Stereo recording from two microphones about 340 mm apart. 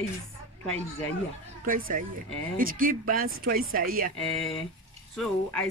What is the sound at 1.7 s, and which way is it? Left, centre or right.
Speech, right.